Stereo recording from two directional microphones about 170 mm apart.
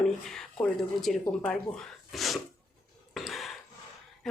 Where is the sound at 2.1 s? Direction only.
Centre (ahead or behind).